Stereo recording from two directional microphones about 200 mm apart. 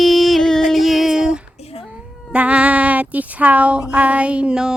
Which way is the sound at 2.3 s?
5° right (ahead or behind).